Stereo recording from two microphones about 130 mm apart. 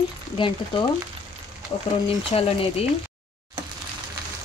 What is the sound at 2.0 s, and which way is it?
Speech, 50° left (ahead or behind).